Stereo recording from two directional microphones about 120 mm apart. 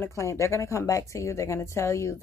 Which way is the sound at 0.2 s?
25° left (ahead or behind).